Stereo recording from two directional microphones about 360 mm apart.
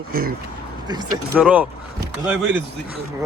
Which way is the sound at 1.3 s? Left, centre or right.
Centre.